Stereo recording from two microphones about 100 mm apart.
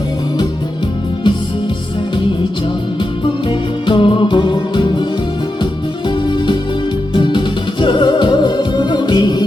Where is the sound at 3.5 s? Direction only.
55° left (ahead or behind).